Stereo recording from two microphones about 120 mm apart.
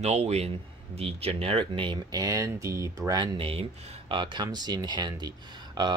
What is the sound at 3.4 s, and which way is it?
Speech, 55° right (ahead or behind).